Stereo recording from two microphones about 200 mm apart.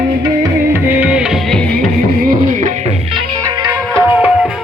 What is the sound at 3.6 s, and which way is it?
Music, 10° right (ahead or behind).